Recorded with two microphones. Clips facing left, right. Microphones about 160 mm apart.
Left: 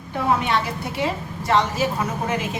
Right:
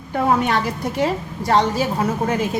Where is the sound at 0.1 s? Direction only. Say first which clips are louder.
Right 3 dB; 45° right (ahead or behind).